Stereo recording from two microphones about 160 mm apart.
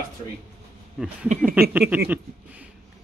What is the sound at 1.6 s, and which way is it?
Speech, 10° right (ahead or behind).